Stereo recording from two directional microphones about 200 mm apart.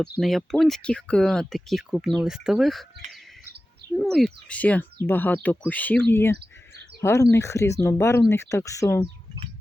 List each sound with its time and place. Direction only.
0.2 s speech: centre (ahead or behind)
3.9 s speech: centre (ahead or behind)
6.3 s chirp: 55° right (ahead or behind)
7.0 s speech: 15° left (ahead or behind)